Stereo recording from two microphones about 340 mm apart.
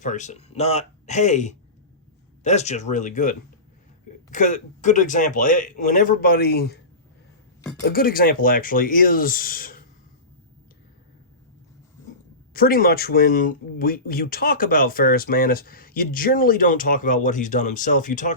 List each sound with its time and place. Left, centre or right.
0.0 s speech: left
7.9 s speech: left
12.5 s speech: left